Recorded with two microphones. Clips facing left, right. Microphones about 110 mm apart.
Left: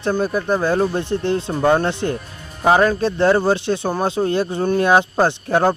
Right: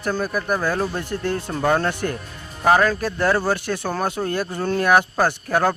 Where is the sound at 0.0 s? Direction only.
25° left (ahead or behind).